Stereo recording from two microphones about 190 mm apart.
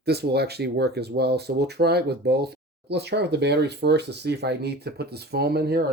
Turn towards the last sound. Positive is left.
turn(degrees=-55)  # may be behind; listen again after turning